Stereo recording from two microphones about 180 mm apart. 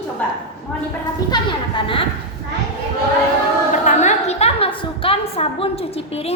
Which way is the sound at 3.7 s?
40° left (ahead or behind).